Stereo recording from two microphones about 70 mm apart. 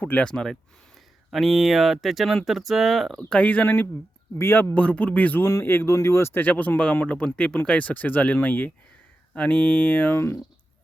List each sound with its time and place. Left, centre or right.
0.0 s speech: left
0.3 s speech: centre
1.3 s speech: centre
3.4 s speech: left
4.4 s speech: left
4.7 s speech: centre
5.4 s speech: left
6.4 s speech: left